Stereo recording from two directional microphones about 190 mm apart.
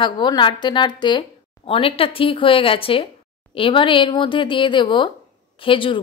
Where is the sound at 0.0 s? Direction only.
25° left (ahead or behind).